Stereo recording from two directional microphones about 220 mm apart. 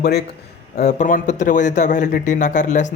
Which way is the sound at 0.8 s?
35° left (ahead or behind).